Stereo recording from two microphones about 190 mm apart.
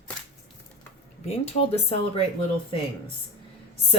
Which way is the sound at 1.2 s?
30° left (ahead or behind).